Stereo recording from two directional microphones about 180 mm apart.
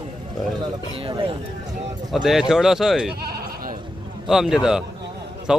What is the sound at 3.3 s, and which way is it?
Sheep, 60° right (ahead or behind).